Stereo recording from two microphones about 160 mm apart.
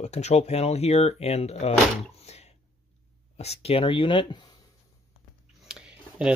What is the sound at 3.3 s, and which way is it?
Speech, 40° left (ahead or behind).